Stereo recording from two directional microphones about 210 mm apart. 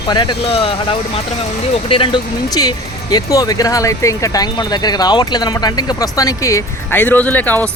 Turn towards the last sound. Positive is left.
turn(degrees=10)  # may be behind; listen again after turning